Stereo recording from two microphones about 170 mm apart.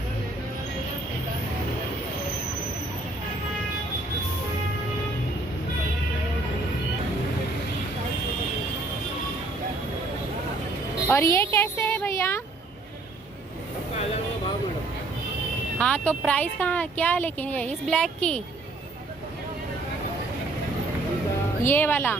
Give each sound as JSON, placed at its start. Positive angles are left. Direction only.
{"t": 11.1, "sound": "a sound", "side_deg": 15}
{"t": 15.8, "sound": "speech", "side_deg": 5}
{"t": 21.6, "sound": "speech", "side_deg": 15}